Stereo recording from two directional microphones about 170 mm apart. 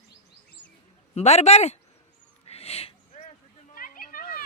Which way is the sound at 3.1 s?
45° left (ahead or behind).